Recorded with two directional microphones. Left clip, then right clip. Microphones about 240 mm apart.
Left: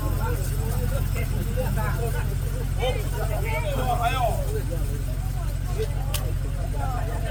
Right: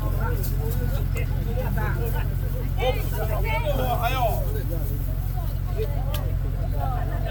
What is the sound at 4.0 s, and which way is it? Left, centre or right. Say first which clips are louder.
Vehicle: left 1 dB; right.